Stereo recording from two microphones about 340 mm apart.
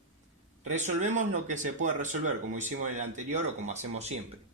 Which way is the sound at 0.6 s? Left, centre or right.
Centre.